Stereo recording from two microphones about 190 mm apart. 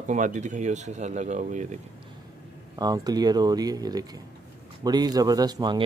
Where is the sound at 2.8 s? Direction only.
20° right (ahead or behind).